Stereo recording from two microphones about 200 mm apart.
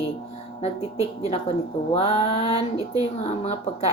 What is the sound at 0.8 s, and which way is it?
Speech, 15° right (ahead or behind).